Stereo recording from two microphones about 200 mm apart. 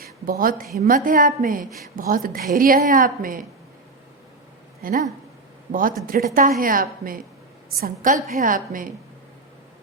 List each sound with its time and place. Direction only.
0.0 s a woman's voice: 45° right (ahead or behind)
4.8 s speech: 45° right (ahead or behind)
6.1 s a woman's voice: 45° right (ahead or behind)